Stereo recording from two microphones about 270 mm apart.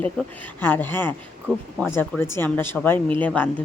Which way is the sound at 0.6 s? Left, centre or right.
Centre.